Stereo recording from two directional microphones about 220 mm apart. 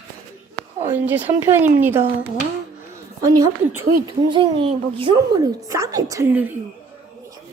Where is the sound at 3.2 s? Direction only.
15° right (ahead or behind).